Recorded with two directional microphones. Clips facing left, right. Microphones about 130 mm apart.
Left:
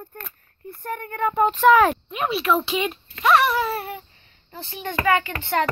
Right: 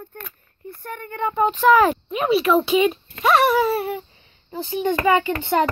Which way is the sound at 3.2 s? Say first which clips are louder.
Right 2 dB; 10° right (ahead or behind).